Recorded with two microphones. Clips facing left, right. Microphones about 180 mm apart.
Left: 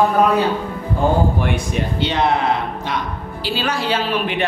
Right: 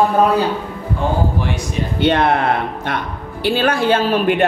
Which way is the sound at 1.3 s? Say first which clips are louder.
Left 1 dB; 55° left (ahead or behind).